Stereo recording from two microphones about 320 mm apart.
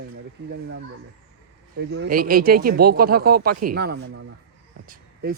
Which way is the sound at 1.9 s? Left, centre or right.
Right.